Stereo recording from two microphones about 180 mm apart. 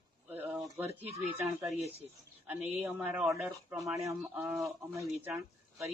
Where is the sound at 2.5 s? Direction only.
10° right (ahead or behind).